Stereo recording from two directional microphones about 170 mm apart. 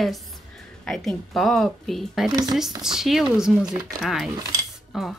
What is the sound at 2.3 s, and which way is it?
Speech, 25° right (ahead or behind).